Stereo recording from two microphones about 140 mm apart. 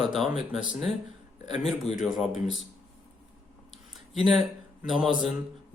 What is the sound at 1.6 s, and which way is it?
Speech, 45° left (ahead or behind).